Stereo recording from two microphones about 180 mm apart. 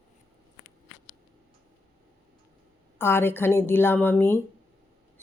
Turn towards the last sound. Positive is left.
turn(degrees=10)  # may be behind; listen again after turning